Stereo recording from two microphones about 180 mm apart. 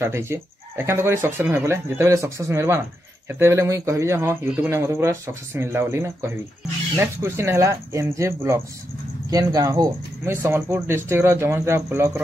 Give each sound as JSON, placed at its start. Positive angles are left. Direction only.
{"t": 0.0, "sound": "speech", "side_deg": -15}